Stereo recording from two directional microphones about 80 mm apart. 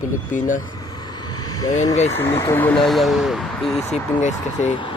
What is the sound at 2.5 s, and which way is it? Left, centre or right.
Speech, left.